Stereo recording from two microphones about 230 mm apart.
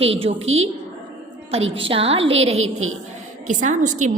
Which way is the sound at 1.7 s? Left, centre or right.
Right.